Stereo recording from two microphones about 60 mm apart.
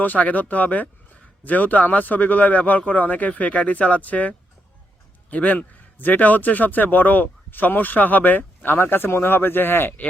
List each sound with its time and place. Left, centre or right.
0.0 s a man's voice: left